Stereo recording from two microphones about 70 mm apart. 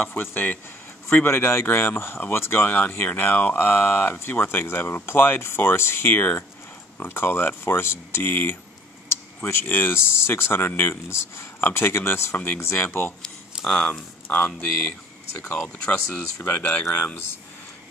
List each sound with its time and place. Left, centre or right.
0.0 s speech: left
9.7 s speech: left
13.7 s speech: centre
15.6 s speech: centre
16.4 s speech: left